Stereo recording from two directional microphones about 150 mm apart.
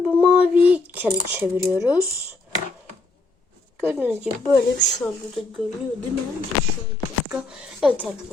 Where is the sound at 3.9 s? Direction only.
10° right (ahead or behind).